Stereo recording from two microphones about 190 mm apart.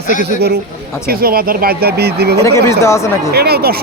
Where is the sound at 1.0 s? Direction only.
50° right (ahead or behind).